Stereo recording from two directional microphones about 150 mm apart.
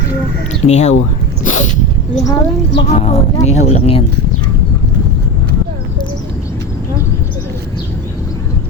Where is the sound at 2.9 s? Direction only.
50° left (ahead or behind).